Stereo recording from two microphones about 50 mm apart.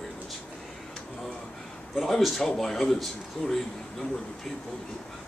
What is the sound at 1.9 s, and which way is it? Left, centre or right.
Speech, centre.